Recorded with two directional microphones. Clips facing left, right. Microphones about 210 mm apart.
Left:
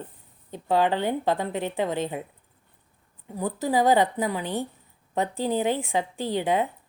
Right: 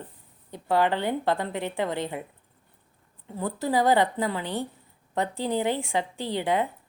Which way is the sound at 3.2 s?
15° left (ahead or behind).